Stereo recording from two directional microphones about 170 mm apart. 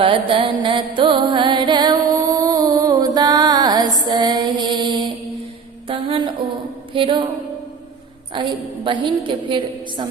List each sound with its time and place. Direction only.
0.0 s music: 30° right (ahead or behind)
5.9 s a sound: 30° right (ahead or behind)
6.9 s a woman's voice: 30° right (ahead or behind)
8.3 s a woman's voice: 30° right (ahead or behind)